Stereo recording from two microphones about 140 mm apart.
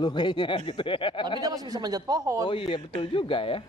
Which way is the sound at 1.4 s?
25° right (ahead or behind).